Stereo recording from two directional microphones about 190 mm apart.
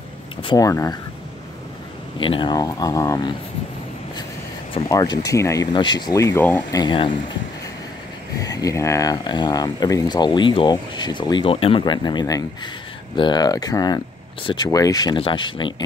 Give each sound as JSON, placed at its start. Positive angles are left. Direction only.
{"t": 0.4, "sound": "speech", "side_deg": 20}
{"t": 2.1, "sound": "speech", "side_deg": 25}
{"t": 4.7, "sound": "speech", "side_deg": 20}
{"t": 6.8, "sound": "speech", "side_deg": 25}
{"t": 8.4, "sound": "speech", "side_deg": 20}